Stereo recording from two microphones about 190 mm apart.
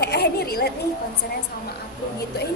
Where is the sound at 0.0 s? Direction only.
55° left (ahead or behind).